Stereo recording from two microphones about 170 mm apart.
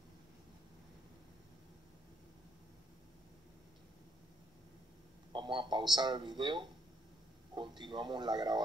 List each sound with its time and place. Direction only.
5.3 s speech: 30° right (ahead or behind)